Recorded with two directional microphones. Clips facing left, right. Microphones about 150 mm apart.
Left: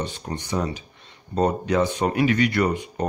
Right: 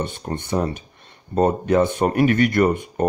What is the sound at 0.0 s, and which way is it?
Speech, 55° right (ahead or behind).